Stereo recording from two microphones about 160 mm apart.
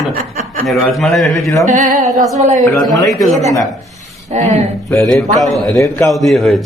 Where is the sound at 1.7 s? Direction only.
50° right (ahead or behind).